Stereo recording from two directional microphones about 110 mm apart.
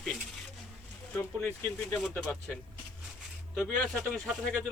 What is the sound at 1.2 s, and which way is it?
Speech, 25° left (ahead or behind).